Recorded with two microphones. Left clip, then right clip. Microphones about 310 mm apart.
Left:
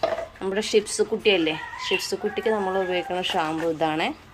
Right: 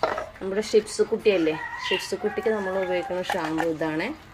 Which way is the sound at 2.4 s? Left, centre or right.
Left.